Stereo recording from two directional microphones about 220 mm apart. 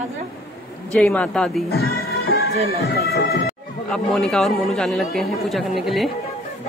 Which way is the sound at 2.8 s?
45° left (ahead or behind).